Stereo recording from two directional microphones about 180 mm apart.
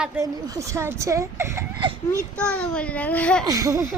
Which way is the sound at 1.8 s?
25° right (ahead or behind).